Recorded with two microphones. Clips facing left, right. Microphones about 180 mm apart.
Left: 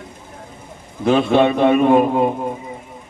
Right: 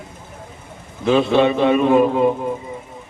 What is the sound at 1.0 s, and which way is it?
A man's voice, 50° left (ahead or behind).